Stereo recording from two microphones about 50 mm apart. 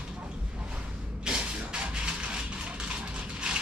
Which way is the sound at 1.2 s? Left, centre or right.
Centre.